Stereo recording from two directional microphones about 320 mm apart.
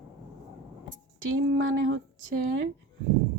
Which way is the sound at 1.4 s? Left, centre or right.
Right.